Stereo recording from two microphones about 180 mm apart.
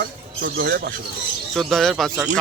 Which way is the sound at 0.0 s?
55° right (ahead or behind).